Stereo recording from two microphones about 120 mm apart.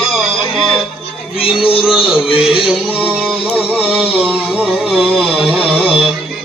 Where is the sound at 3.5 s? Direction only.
5° right (ahead or behind).